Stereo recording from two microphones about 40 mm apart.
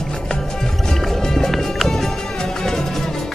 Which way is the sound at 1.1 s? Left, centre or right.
Centre.